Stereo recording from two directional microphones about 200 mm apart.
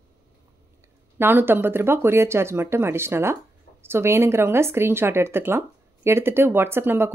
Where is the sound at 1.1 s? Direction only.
10° right (ahead or behind).